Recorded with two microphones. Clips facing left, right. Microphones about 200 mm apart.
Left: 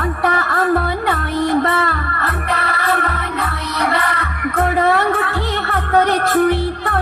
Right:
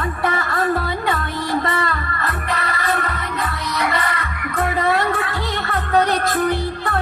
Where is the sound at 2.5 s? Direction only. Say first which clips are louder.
Left 3 dB; 60° left (ahead or behind).